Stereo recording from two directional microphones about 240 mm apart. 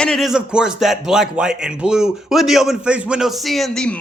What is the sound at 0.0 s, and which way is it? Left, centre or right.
Speech, centre.